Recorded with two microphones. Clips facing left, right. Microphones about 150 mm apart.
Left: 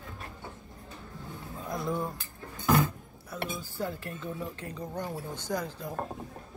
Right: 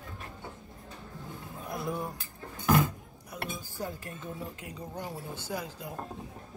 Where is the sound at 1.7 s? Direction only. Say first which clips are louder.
Left 2 dB; 10° right (ahead or behind).